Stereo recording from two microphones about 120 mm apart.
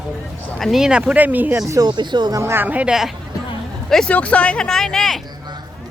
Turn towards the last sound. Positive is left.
turn(degrees=5)  # may be behind; listen again after turning